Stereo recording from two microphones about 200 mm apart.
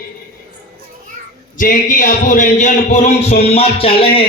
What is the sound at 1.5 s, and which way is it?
Speech, 40° left (ahead or behind).